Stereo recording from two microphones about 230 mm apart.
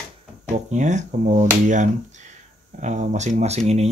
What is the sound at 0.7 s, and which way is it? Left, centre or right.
Speech, right.